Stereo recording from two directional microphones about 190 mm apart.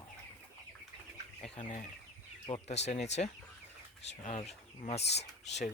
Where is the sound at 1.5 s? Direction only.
40° left (ahead or behind).